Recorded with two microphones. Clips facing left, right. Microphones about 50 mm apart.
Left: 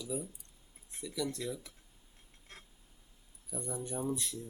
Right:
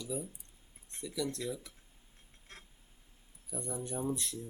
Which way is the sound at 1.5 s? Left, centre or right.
Centre.